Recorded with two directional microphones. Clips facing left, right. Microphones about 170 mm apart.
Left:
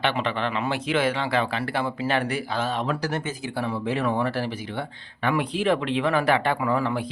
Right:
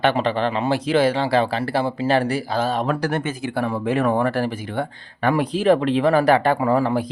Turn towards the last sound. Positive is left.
turn(degrees=-40)  # may be behind; listen again after turning